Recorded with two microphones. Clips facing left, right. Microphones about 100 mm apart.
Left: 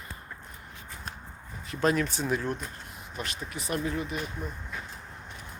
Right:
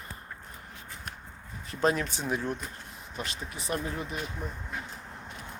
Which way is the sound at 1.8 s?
20° right (ahead or behind).